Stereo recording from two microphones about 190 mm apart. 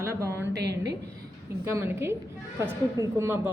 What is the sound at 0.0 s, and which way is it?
Speech, 15° right (ahead or behind).